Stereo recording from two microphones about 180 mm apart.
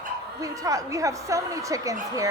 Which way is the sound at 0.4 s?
20° right (ahead or behind).